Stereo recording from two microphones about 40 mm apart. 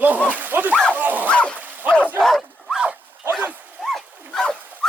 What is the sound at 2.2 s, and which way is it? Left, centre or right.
Speech, centre.